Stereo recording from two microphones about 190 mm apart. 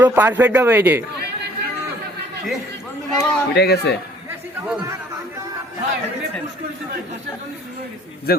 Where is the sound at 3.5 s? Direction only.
60° left (ahead or behind).